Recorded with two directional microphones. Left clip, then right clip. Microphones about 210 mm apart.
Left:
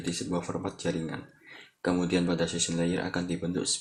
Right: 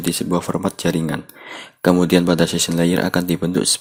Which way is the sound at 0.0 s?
45° right (ahead or behind).